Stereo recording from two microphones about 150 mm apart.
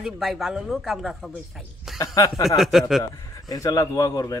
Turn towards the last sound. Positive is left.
turn(degrees=20)  # may be behind; listen again after turning